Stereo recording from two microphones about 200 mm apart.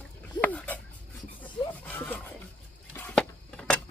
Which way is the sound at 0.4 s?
10° left (ahead or behind).